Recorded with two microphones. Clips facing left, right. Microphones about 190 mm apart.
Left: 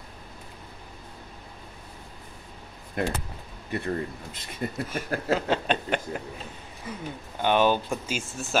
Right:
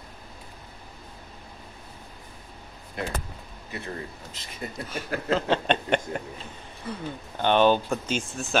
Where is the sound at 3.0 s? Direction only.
50° left (ahead or behind).